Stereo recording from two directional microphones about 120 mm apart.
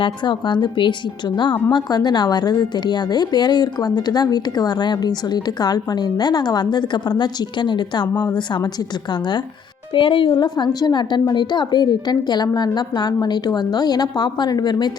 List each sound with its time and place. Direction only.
0.0 s a woman's voice: 40° left (ahead or behind)
9.9 s a woman's voice: 45° left (ahead or behind)